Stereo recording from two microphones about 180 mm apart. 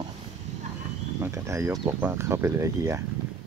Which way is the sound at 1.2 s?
15° right (ahead or behind).